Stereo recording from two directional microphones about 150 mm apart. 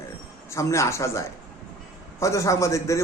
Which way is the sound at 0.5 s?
20° left (ahead or behind).